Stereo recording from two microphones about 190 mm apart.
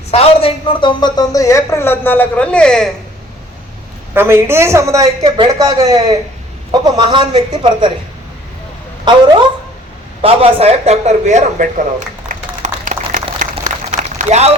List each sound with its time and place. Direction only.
0.1 s a man's voice: 30° left (ahead or behind); by 2.9 s 5° left (ahead or behind)
4.1 s a woman's voice: 10° right (ahead or behind)
9.1 s a man's voice: 25° right (ahead or behind); by 13.1 s 40° right (ahead or behind)
14.2 s speech: 35° right (ahead or behind)